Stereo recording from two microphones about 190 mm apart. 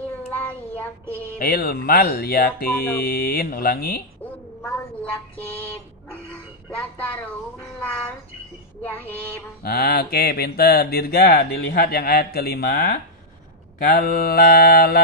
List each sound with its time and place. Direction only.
0.3 s child singing: 10° left (ahead or behind)
1.4 s mantra: 50° left (ahead or behind)
8.8 s a sound: 10° left (ahead or behind)
9.6 s mantra: 55° left (ahead or behind)